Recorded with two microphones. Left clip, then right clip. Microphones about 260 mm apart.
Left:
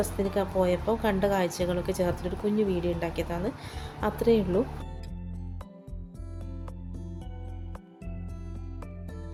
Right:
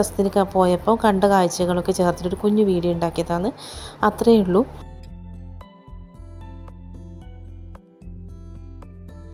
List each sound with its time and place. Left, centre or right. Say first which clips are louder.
0.2 s a woman's voice: right 9 dB; right